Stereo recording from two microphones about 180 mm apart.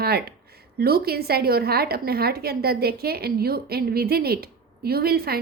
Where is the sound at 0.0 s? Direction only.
60° right (ahead or behind).